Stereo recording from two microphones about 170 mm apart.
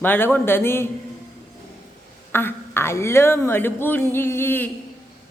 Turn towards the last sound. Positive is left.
turn(degrees=10)  # may be behind; listen again after turning